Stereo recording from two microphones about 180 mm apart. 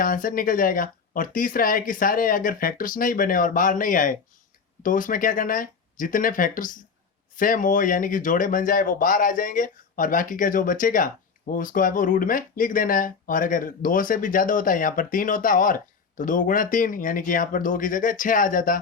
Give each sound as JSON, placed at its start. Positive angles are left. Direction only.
{"t": 0.0, "sound": "speech", "side_deg": 50}